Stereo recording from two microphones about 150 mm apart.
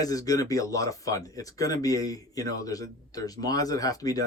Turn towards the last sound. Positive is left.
turn(degrees=25)  # may be behind; listen again after turning